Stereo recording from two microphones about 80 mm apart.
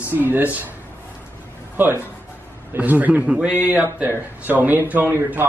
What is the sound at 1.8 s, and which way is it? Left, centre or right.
A man's voice, right.